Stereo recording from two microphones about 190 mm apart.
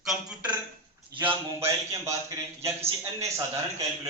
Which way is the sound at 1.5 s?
15° right (ahead or behind).